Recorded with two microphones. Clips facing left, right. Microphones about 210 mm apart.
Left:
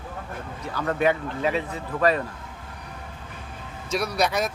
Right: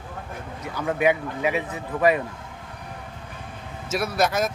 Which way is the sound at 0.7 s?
10° right (ahead or behind).